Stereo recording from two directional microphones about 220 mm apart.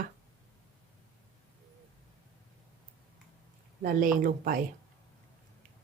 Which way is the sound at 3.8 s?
40° right (ahead or behind).